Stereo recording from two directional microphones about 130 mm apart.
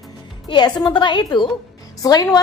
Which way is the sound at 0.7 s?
35° left (ahead or behind).